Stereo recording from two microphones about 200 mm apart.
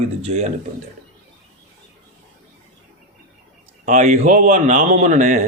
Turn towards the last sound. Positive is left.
turn(degrees=-35)  # may be behind; listen again after turning